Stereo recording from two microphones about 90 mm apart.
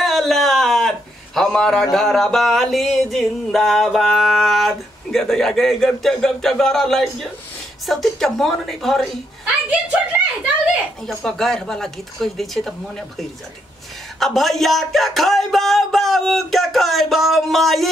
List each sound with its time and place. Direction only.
0.0 s a man's voice: 5° left (ahead or behind)
9.7 s speech: 15° right (ahead or behind)
11.1 s speech: 5° left (ahead or behind)
14.2 s speech: centre (ahead or behind)